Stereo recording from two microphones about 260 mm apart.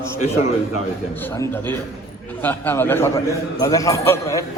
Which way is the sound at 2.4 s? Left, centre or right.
Centre.